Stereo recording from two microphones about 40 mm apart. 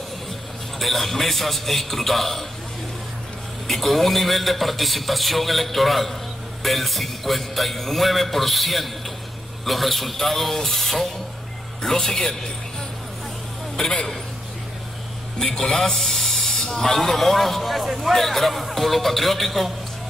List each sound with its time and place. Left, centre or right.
0.7 s a man's voice: centre
3.6 s a man's voice: centre
13.8 s a man's voice: centre
15.3 s a man's voice: centre